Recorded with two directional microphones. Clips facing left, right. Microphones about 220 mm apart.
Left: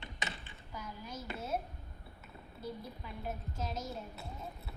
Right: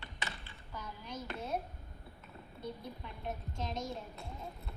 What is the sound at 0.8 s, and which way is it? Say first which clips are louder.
Speech: even; 5° left (ahead or behind).